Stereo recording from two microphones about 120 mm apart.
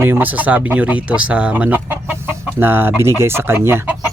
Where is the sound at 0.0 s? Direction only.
15° right (ahead or behind).